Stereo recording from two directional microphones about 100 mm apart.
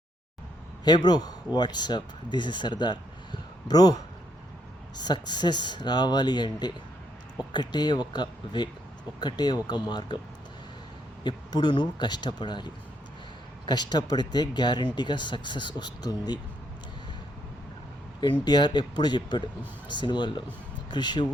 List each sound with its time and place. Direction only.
0.9 s speech: 45° left (ahead or behind)
11.2 s speech: 45° left (ahead or behind)
18.4 s speech: 45° left (ahead or behind)